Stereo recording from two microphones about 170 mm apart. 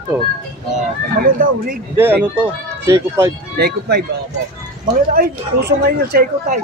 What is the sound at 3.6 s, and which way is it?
Speech, 70° right (ahead or behind).